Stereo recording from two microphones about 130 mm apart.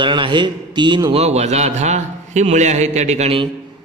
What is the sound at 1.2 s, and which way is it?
A man's voice, 55° right (ahead or behind).